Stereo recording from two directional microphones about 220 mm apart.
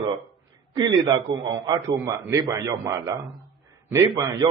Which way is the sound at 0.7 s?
20° right (ahead or behind).